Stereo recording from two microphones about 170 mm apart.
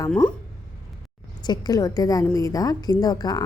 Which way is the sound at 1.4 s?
25° left (ahead or behind).